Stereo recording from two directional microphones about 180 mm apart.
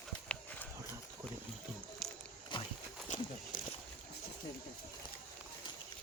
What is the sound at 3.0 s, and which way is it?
Horse, 45° left (ahead or behind).